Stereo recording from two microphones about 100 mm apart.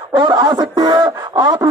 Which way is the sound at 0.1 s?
45° right (ahead or behind).